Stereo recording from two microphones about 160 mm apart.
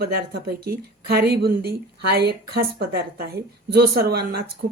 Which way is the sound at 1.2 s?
85° right.